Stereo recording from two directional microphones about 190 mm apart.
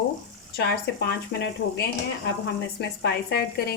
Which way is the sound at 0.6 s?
60° left (ahead or behind).